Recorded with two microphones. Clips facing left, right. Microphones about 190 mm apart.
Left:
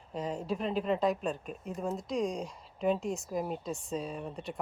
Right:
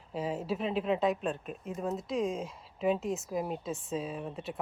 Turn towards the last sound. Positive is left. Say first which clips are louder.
# right 1 dB
turn(degrees=0)  # may be behind; listen again after turning